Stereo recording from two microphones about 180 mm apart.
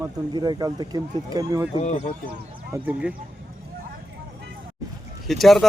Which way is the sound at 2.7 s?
10° right (ahead or behind).